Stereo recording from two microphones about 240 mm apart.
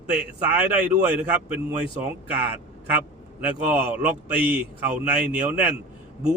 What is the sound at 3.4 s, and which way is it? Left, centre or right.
Speech, centre.